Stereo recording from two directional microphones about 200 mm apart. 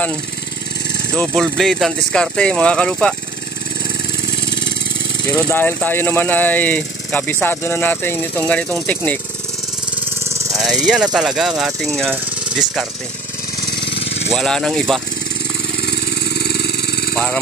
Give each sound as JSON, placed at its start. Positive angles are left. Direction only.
{"t": 1.1, "sound": "speech", "side_deg": 0}
{"t": 5.3, "sound": "speech", "side_deg": 10}
{"t": 10.2, "sound": "a sound", "side_deg": -15}
{"t": 10.6, "sound": "speech", "side_deg": 0}
{"t": 12.1, "sound": "a sound", "side_deg": -5}
{"t": 14.3, "sound": "speech", "side_deg": 0}
{"t": 15.8, "sound": "vehicle", "side_deg": 55}
{"t": 17.1, "sound": "speech", "side_deg": 5}